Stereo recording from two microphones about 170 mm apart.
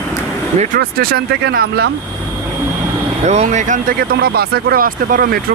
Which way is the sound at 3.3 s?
45° right (ahead or behind).